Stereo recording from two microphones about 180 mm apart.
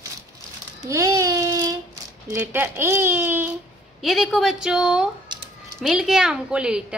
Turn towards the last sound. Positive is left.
turn(degrees=-5)  # may be behind; listen again after turning